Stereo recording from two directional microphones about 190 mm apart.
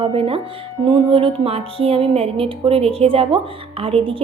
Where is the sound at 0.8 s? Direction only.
30° right (ahead or behind).